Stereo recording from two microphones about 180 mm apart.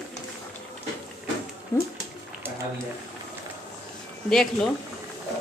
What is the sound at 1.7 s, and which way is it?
Speech, 15° left (ahead or behind).